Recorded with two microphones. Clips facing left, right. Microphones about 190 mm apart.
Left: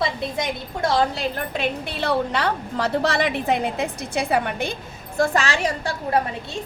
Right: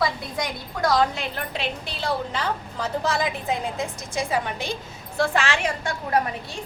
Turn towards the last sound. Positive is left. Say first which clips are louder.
# left 2 dB
turn(degrees=35)  # may be behind; listen again after turning